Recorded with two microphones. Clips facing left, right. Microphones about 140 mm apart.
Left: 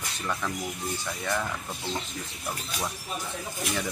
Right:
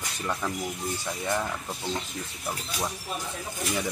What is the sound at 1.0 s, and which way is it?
Speech, 15° right (ahead or behind).